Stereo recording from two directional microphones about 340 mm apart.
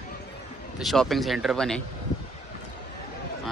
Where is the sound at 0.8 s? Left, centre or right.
Centre.